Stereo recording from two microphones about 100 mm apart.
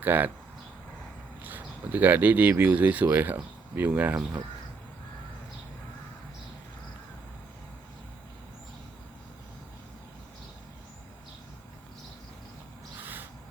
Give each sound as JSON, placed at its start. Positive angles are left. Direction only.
{"t": 0.0, "sound": "speech", "side_deg": -20}
{"t": 1.4, "sound": "speech", "side_deg": -20}
{"t": 13.0, "sound": "a sound", "side_deg": -20}